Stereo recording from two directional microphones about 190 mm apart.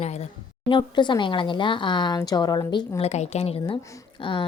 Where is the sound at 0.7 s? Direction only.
25° left (ahead or behind).